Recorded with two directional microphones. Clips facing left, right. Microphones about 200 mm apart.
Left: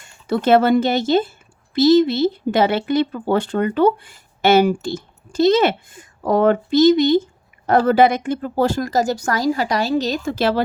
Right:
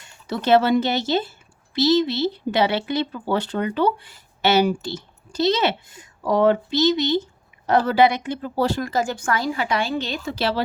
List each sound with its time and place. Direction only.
0.0 s speech: 50° left (ahead or behind)